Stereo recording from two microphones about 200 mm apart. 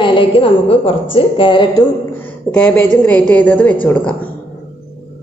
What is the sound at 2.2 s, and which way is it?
A woman's voice, 5° left (ahead or behind).